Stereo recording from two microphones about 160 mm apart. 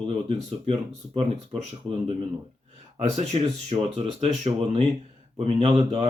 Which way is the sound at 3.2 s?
40° right (ahead or behind).